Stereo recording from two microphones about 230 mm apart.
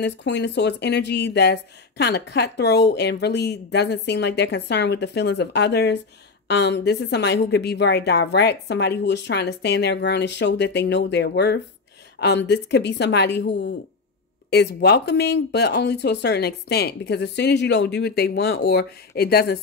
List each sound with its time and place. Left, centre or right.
0.0 s a woman's voice: left